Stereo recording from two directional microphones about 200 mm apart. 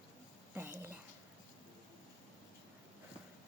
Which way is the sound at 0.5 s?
10° right (ahead or behind).